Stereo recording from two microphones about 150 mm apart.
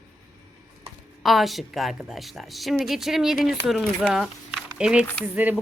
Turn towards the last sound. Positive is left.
turn(degrees=-10)  # may be behind; listen again after turning